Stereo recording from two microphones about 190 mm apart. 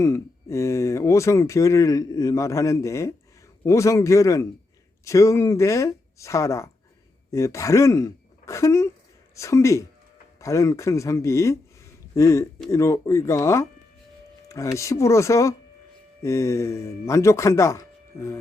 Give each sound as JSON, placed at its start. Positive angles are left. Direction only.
{"t": 0.0, "sound": "speech", "side_deg": 15}